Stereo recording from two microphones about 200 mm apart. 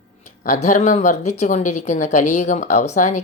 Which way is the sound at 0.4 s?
40° left (ahead or behind).